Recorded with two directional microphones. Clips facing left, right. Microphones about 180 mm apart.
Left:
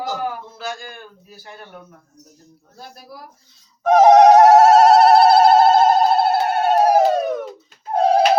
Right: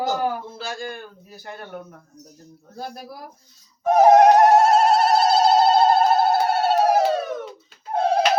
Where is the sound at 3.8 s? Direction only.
90° left; by 7.2 s 50° left (ahead or behind).